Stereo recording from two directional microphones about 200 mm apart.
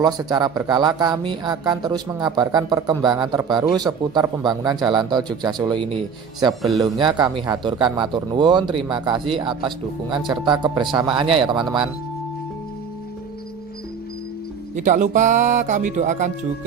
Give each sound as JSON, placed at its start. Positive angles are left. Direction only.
{"t": 0.0, "sound": "speech", "side_deg": -20}
{"t": 14.8, "sound": "speech", "side_deg": -40}